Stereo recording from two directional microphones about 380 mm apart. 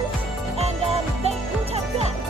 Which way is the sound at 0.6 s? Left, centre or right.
Centre.